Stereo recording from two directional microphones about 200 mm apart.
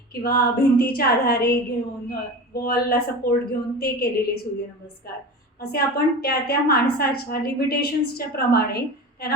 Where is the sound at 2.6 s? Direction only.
50° left (ahead or behind).